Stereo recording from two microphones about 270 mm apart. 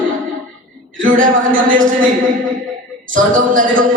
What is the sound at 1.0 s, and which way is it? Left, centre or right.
Speech, right.